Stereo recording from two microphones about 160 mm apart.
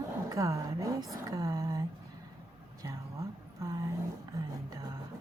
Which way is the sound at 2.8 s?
20° right (ahead or behind).